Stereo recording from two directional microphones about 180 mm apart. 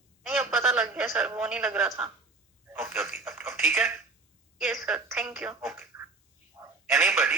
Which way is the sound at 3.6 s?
Centre (ahead or behind).